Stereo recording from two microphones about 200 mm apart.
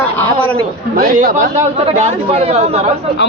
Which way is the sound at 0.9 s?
45° right (ahead or behind).